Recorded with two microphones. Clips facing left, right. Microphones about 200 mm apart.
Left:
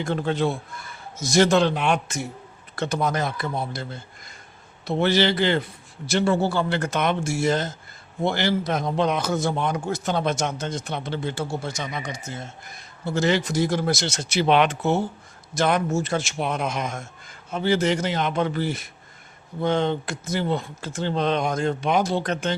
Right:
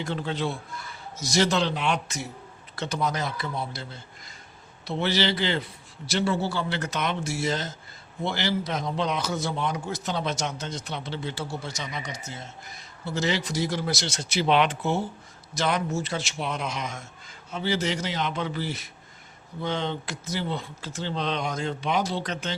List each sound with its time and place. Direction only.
0.0 s a man's voice: 50° left (ahead or behind)